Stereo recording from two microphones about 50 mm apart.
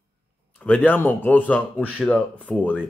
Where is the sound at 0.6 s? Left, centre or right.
Left.